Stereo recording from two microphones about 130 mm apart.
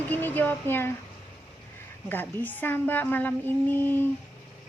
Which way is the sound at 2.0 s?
15° left (ahead or behind).